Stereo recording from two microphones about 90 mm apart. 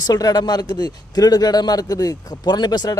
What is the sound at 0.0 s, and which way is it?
A man's voice, 45° left (ahead or behind).